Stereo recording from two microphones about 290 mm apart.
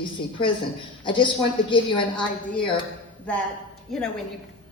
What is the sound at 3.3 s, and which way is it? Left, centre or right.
Speech, centre.